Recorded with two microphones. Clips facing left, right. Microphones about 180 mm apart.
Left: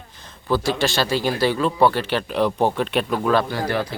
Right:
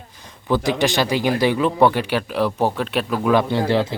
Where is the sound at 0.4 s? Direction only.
15° right (ahead or behind).